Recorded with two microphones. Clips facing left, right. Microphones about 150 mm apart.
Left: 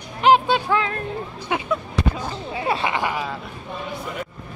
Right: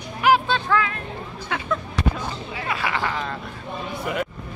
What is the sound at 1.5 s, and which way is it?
Speech, 20° left (ahead or behind).